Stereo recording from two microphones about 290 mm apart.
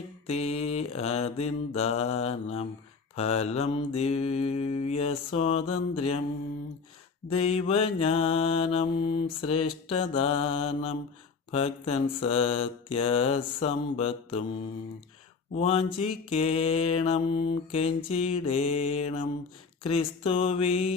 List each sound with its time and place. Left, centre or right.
0.3 s mantra: left
7.3 s mantra: left
15.5 s mantra: centre